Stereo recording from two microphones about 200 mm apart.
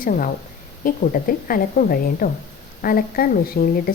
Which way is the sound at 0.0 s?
45° left (ahead or behind).